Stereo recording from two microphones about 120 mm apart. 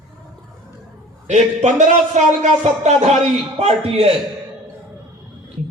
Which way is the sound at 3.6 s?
60° right (ahead or behind).